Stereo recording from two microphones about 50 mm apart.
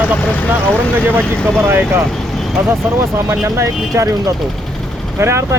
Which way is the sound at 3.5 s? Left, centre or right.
Right.